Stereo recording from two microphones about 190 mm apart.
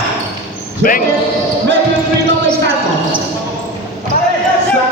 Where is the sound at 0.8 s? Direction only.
45° left (ahead or behind).